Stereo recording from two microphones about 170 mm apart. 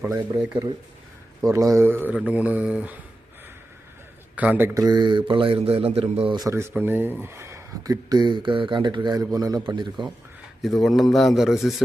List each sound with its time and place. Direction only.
1.4 s speech: 20° right (ahead or behind)
4.4 s speech: 10° right (ahead or behind); by 10.1 s 25° right (ahead or behind)
10.6 s speech: centre (ahead or behind)